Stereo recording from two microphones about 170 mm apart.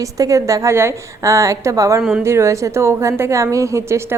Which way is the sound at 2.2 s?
15° right (ahead or behind).